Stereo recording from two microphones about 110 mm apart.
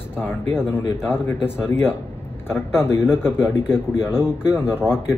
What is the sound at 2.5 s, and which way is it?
A man's voice, 20° left (ahead or behind).